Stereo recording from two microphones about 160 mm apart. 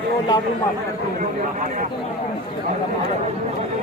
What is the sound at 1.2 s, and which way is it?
Speech, 55° right (ahead or behind).